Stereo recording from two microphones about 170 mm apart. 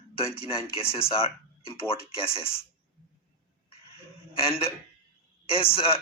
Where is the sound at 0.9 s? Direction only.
35° left (ahead or behind).